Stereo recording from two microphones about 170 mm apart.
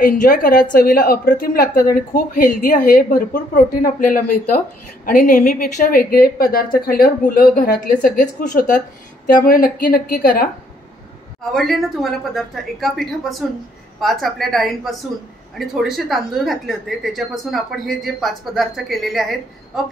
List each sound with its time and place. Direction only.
0.0 s a woman's voice: 55° left (ahead or behind)
11.5 s a woman's voice: centre (ahead or behind)